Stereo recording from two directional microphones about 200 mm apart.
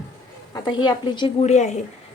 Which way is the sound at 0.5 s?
20° left (ahead or behind).